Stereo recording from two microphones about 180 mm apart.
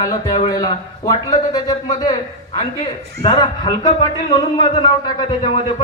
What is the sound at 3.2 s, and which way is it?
A man's voice, 25° left (ahead or behind).